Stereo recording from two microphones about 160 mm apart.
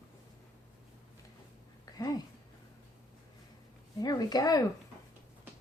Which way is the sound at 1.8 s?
20° left (ahead or behind).